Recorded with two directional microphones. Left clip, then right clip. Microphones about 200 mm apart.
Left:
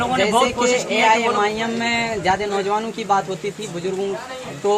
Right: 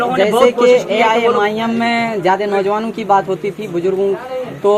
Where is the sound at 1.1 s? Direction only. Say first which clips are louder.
Right 4 dB; 35° right (ahead or behind).